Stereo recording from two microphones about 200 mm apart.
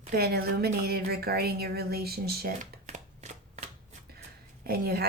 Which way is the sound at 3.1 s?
35° right (ahead or behind).